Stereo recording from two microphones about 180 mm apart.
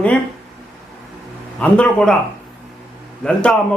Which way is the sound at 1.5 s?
5° left (ahead or behind).